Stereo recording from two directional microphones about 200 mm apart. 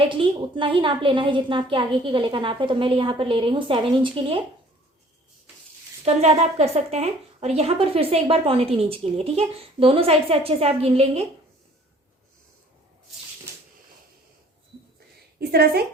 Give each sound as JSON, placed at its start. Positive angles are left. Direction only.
{"t": 0.1, "sound": "speech", "side_deg": -25}
{"t": 6.1, "sound": "speech", "side_deg": -35}
{"t": 15.4, "sound": "a woman's voice", "side_deg": -50}